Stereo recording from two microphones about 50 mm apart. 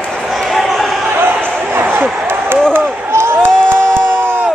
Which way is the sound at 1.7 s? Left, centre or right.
Right.